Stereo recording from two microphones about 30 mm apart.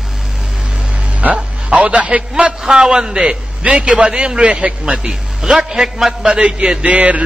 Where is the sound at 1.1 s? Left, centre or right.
Right.